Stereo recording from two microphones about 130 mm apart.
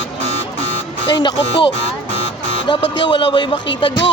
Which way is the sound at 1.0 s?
35° left (ahead or behind).